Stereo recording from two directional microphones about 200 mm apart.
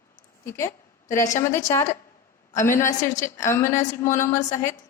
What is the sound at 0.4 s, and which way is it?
A woman's voice, 15° left (ahead or behind).